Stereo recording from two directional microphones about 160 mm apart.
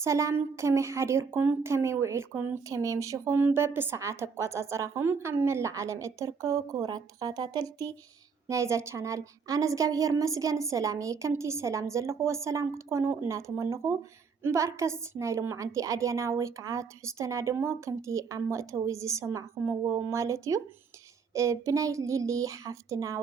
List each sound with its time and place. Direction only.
0.0 s a woman's voice: 20° right (ahead or behind)